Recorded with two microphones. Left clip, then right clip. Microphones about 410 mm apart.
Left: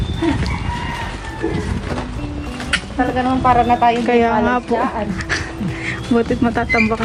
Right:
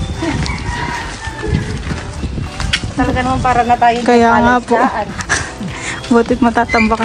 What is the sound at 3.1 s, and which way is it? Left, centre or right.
Speech, right.